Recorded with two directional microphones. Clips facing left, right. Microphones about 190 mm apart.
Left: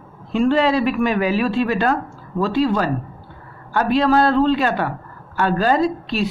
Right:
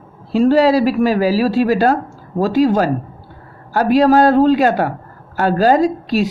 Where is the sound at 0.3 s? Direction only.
40° right (ahead or behind).